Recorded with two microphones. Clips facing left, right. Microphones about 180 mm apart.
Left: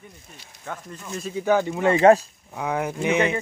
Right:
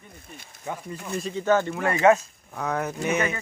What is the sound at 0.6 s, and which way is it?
Speech, 10° right (ahead or behind).